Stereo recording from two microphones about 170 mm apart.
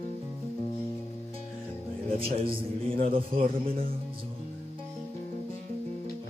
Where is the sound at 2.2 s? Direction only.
30° right (ahead or behind).